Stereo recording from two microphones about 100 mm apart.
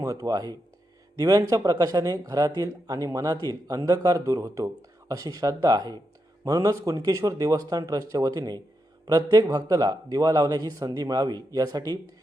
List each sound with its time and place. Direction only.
0.0 s speech: 35° right (ahead or behind)